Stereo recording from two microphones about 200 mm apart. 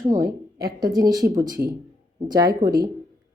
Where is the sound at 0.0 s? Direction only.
15° right (ahead or behind).